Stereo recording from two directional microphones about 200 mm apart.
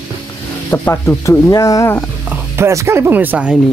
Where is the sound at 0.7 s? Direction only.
10° left (ahead or behind).